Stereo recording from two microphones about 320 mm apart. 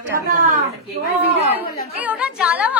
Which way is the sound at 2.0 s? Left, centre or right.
Centre.